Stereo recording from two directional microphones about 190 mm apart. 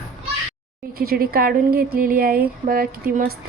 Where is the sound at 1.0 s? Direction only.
50° right (ahead or behind).